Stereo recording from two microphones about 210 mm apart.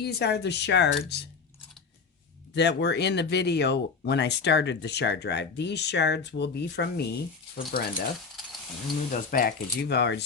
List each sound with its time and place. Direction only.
0.0 s speech: 50° left (ahead or behind)
2.6 s speech: 55° left (ahead or behind)
9.1 s speech: 40° left (ahead or behind)